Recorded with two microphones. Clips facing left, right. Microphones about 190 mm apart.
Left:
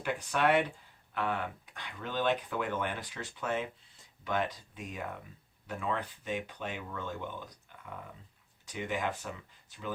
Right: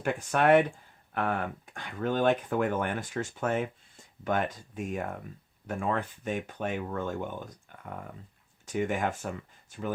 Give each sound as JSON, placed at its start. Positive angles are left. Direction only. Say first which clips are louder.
{"t": 0.0, "sound": "speech", "louder": "right 4 dB", "side_deg": -45}